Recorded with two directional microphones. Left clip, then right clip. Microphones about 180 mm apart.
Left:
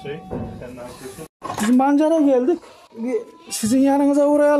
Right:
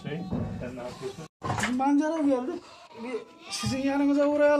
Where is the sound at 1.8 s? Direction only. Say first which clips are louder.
Left 10 dB; 50° left (ahead or behind).